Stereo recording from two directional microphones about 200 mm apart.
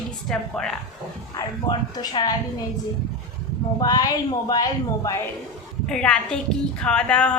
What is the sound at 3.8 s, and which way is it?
Speech, 20° left (ahead or behind).